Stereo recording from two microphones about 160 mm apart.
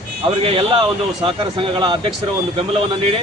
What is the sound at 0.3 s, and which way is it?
Speech, 35° right (ahead or behind).